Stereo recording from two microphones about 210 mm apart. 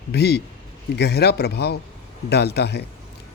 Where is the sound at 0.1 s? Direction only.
50° left (ahead or behind).